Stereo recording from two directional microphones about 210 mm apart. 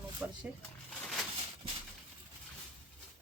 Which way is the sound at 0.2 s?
5° right (ahead or behind).